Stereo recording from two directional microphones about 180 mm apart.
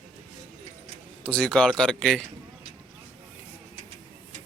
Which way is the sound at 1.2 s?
5° left (ahead or behind).